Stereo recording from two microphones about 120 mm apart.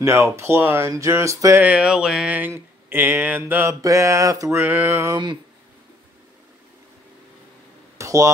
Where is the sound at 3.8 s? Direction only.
25° right (ahead or behind).